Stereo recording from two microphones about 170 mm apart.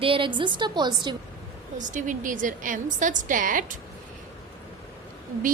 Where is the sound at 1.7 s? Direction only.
45° right (ahead or behind).